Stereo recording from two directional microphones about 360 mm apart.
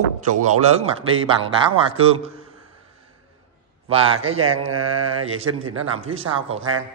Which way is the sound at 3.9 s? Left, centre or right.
Centre.